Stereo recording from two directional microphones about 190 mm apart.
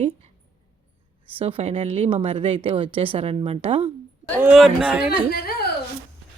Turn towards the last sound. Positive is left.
turn(degrees=55)  # may be behind; listen again after turning